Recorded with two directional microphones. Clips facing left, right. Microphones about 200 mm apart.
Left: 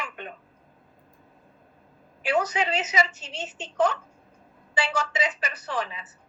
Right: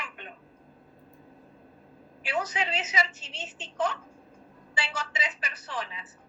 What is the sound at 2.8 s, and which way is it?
A woman's voice, 40° left (ahead or behind).